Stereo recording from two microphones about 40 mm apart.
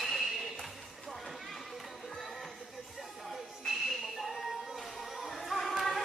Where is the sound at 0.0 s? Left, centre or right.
Centre.